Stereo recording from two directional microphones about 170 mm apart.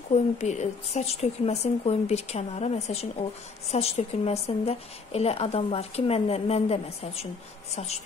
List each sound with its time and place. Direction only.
0.1 s a woman's voice: 45° left (ahead or behind)